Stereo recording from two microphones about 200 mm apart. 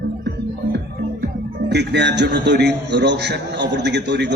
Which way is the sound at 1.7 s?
55° right (ahead or behind).